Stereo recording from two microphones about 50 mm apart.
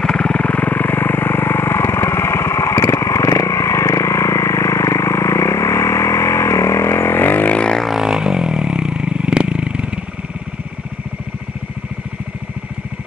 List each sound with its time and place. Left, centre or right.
0.0 s vehicle: centre; by 7.5 s left
7.5 s music: centre
8.0 s vehicle: centre